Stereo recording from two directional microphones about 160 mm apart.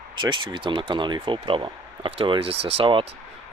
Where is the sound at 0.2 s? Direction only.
30° right (ahead or behind).